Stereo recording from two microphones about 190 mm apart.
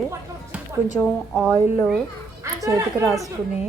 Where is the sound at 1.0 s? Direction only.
5° left (ahead or behind).